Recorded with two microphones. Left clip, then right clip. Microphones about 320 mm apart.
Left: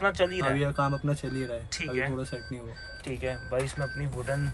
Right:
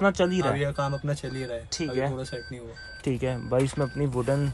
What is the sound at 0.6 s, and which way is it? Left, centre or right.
Speech, centre.